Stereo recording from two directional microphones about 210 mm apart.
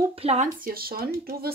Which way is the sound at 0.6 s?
45° right (ahead or behind).